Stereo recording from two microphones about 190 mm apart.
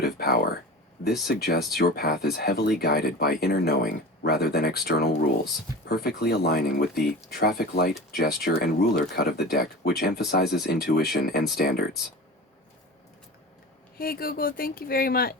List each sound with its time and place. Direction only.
0.0 s speech: 55° left (ahead or behind)
14.0 s speech: 50° left (ahead or behind)